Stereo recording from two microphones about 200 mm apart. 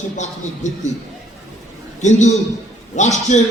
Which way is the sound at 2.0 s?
35° left (ahead or behind).